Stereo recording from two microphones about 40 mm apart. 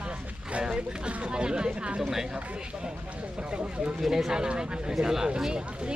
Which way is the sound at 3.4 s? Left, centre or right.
Right.